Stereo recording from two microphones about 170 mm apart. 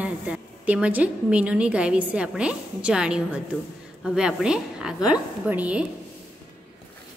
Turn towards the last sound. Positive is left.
turn(degrees=-10)  # may be behind; listen again after turning